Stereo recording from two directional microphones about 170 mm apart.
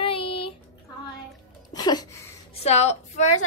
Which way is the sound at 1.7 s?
25° left (ahead or behind).